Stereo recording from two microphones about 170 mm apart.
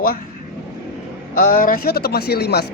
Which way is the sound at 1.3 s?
55° left (ahead or behind).